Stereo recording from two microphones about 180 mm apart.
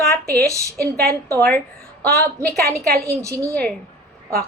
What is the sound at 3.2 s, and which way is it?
Speech, 15° right (ahead or behind).